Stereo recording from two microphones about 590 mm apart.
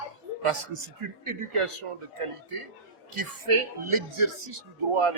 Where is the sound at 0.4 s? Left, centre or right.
Right.